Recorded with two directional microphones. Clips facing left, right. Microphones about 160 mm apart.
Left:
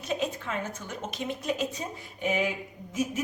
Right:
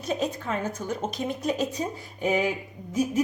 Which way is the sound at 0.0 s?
40° right (ahead or behind).